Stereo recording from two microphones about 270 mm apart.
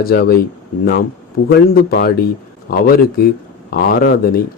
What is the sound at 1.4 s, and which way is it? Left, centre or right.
Speech, left.